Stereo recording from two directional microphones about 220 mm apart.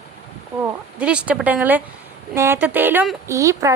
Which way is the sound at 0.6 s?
5° right (ahead or behind).